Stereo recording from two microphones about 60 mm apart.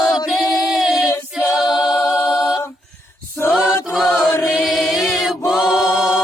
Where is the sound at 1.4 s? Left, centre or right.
Centre.